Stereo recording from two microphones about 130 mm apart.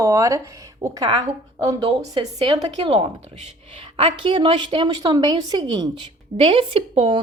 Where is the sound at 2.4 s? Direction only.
35° right (ahead or behind).